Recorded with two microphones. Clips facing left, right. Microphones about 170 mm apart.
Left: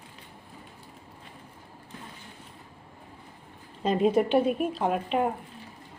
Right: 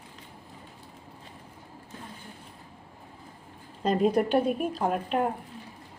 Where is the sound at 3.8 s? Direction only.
5° left (ahead or behind).